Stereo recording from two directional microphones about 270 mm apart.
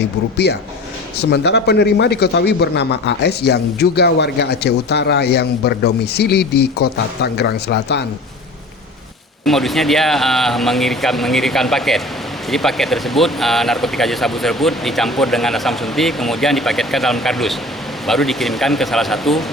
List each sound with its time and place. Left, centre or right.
0.0 s a man's voice: left
9.4 s speech: centre